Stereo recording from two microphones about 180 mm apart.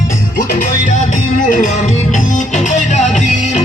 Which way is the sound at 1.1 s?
45° left (ahead or behind).